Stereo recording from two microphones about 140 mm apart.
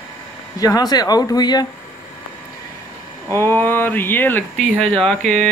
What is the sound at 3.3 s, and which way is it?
Speech, 15° left (ahead or behind).